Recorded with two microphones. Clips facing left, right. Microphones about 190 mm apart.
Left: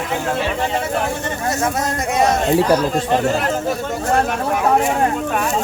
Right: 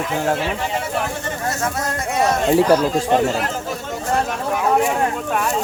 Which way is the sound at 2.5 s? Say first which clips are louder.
Right 3 dB; 5° right (ahead or behind).